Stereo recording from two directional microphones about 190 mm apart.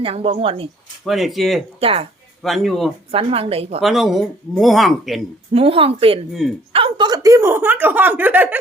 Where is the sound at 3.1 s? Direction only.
30° right (ahead or behind).